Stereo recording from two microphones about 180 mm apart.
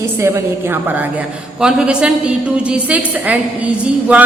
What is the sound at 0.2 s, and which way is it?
A woman's voice, 15° right (ahead or behind).